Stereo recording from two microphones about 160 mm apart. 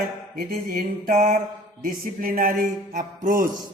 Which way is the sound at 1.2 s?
50° right (ahead or behind).